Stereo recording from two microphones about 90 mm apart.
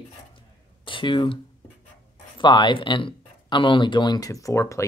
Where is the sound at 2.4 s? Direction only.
60° left (ahead or behind).